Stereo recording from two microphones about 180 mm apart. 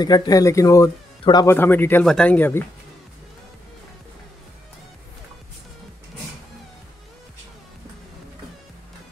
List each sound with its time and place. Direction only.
0.0 s speech: 25° left (ahead or behind)